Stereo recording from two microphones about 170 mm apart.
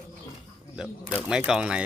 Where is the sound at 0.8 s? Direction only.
5° right (ahead or behind).